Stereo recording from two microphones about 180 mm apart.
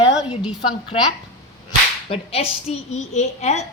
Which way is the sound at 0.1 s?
5° right (ahead or behind).